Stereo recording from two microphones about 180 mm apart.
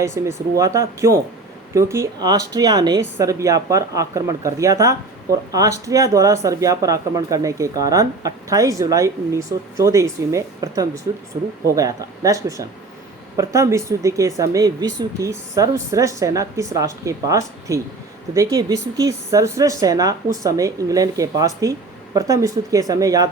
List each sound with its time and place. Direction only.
0.0 s speech: 15° right (ahead or behind)